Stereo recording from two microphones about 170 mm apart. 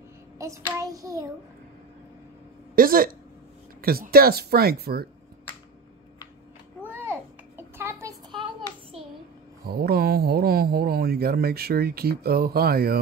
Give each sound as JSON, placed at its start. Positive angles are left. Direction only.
{"t": 0.4, "sound": "child singing", "side_deg": -20}
{"t": 2.7, "sound": "speech", "side_deg": -60}
{"t": 6.8, "sound": "a sound", "side_deg": -10}
{"t": 9.7, "sound": "speech", "side_deg": -65}